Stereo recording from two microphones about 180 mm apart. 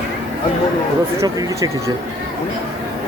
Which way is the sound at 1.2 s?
20° right (ahead or behind).